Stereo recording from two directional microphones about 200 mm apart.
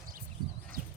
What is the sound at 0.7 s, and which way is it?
Clip-clop, 45° right (ahead or behind).